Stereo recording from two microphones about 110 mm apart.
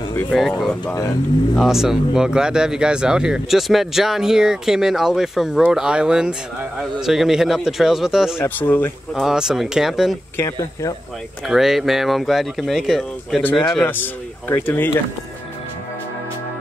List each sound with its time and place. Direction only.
0.3 s speech: centre (ahead or behind)
8.4 s speech: 20° left (ahead or behind)
9.1 s speech: 5° right (ahead or behind)
10.3 s speech: 25° left (ahead or behind)
11.4 s speech: centre (ahead or behind)
13.8 s speech: 20° left (ahead or behind)